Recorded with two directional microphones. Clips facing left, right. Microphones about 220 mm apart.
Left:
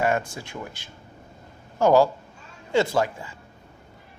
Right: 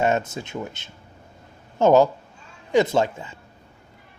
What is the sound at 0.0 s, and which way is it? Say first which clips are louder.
Speech: right 2 dB; 25° right (ahead or behind).